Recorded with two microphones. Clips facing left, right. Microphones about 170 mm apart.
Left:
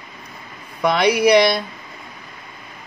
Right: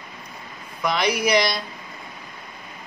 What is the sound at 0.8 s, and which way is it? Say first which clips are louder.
Speech: left 7 dB; 60° left (ahead or behind).